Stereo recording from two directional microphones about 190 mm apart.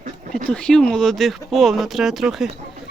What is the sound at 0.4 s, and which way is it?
Speech, 5° left (ahead or behind).